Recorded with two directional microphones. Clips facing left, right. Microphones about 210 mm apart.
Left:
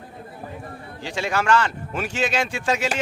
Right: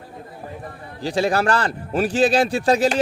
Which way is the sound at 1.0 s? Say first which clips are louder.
Right 4 dB; 35° right (ahead or behind).